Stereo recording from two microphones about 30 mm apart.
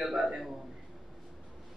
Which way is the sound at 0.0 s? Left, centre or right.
Centre.